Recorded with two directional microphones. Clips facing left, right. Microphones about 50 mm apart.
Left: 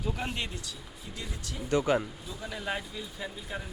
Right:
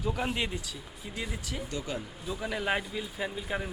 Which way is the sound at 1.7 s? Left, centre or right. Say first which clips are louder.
Left 12 dB; left.